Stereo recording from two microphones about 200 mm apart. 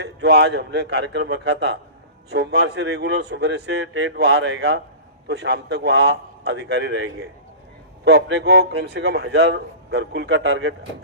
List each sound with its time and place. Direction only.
0.0 s a man's voice: 55° right (ahead or behind)